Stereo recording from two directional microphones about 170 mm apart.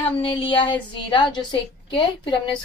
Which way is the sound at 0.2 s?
35° left (ahead or behind).